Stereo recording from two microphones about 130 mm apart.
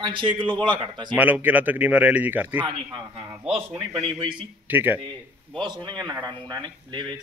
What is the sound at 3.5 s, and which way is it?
Speech, 40° right (ahead or behind).